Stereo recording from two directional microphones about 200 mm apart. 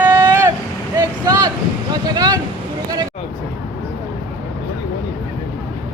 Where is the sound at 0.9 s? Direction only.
20° right (ahead or behind).